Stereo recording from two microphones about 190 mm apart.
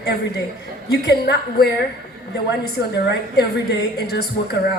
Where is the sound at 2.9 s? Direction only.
60° left (ahead or behind).